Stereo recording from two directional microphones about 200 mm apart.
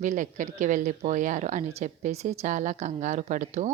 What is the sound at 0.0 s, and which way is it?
Speech, 40° right (ahead or behind).